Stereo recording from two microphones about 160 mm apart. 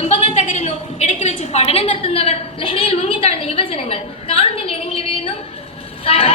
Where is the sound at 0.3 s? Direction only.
45° left (ahead or behind).